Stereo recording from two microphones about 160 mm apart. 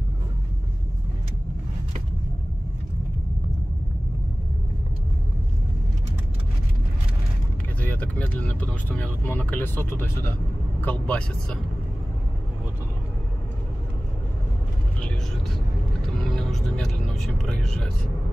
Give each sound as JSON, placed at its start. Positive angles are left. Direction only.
{"t": 7.8, "sound": "speech", "side_deg": 10}
{"t": 16.2, "sound": "music", "side_deg": 0}